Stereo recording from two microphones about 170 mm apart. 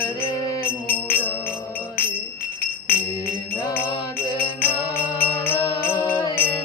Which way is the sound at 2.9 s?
65° left (ahead or behind).